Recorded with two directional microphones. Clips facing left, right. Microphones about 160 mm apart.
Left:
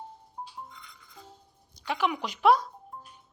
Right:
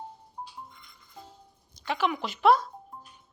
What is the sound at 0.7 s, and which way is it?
Music, 85° left.